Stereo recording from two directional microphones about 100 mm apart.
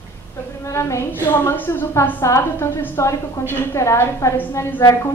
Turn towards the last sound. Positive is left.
turn(degrees=25)  # may be behind; listen again after turning